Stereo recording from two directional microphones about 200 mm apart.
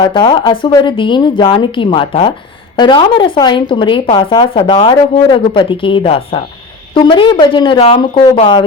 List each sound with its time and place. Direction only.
0.0 s speech: 25° left (ahead or behind)